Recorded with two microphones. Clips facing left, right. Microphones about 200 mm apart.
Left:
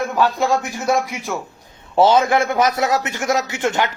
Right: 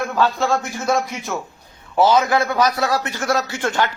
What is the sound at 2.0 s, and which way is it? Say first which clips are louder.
A man's voice: left 2 dB; 25° left (ahead or behind).